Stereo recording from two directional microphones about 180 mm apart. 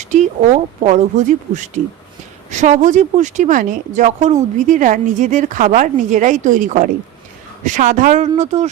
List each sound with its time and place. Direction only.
0.0 s speech: 40° right (ahead or behind)